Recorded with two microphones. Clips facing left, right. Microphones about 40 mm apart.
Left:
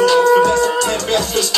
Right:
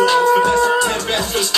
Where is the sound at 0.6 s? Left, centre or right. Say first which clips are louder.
Right 1 dB; centre.